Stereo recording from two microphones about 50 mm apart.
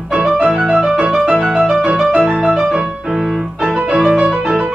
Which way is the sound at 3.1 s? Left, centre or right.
Centre.